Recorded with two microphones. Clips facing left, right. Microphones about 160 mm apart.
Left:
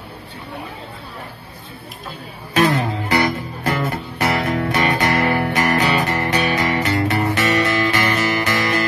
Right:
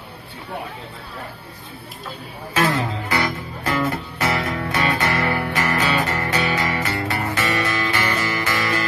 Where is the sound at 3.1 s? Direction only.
20° left (ahead or behind).